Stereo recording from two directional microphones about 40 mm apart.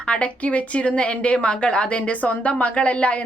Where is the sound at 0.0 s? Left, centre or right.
Left.